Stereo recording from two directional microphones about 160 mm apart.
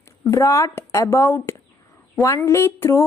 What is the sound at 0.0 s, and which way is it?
A woman's voice, 20° left (ahead or behind).